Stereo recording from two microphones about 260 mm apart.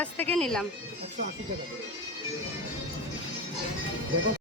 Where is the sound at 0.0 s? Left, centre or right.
Centre.